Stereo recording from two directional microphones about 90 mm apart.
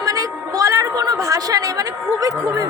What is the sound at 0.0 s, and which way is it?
A woman's voice, 45° right (ahead or behind).